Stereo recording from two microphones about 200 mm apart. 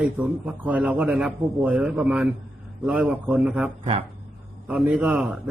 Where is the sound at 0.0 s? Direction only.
5° right (ahead or behind).